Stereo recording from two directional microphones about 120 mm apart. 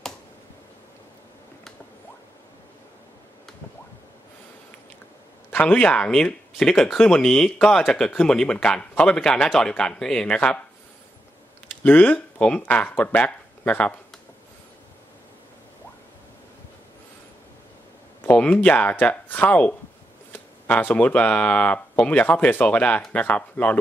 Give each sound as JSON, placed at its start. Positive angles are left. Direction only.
{"t": 5.5, "sound": "speech", "side_deg": 15}
{"t": 11.8, "sound": "speech", "side_deg": 15}
{"t": 18.2, "sound": "speech", "side_deg": 15}